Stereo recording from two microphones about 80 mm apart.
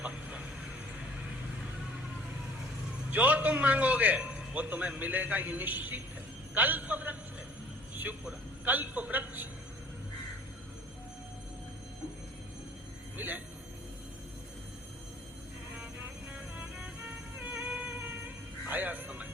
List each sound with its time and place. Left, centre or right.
0.0 s vehicle: centre
3.1 s a man's voice: centre
13.1 s speech: right
17.3 s music: right